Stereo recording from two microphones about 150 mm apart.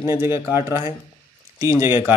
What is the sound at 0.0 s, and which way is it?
Speech, 15° right (ahead or behind).